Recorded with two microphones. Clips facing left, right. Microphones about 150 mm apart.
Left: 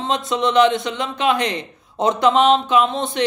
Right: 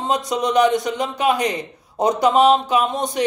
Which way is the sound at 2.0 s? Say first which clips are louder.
Even; 10° right (ahead or behind).